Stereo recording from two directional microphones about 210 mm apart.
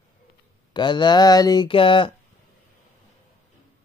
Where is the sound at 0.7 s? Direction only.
20° left (ahead or behind).